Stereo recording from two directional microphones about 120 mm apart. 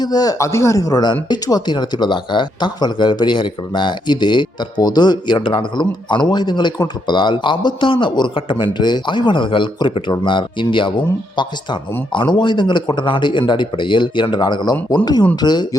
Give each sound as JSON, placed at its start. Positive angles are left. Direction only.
{"t": 0.0, "sound": "speech", "side_deg": 35}